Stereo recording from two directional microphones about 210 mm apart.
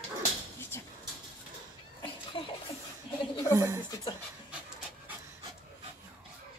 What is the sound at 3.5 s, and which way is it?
Speech, 15° right (ahead or behind).